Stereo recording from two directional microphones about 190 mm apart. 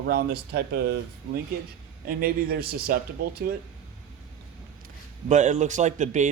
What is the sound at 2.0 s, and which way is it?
Speech, 50° right (ahead or behind).